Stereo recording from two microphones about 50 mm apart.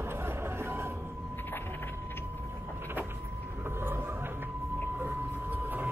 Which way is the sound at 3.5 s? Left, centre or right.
Right.